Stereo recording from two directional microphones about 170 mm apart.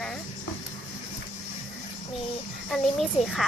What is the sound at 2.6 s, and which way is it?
Speech, centre (ahead or behind).